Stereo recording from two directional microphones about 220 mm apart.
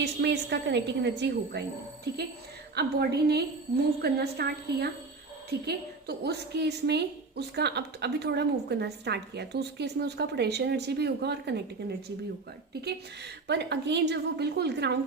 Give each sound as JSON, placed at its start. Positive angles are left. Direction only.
{"t": 0.0, "sound": "a woman's voice", "side_deg": -50}
{"t": 2.7, "sound": "a woman's voice", "side_deg": -45}
{"t": 12.8, "sound": "a woman's voice", "side_deg": -50}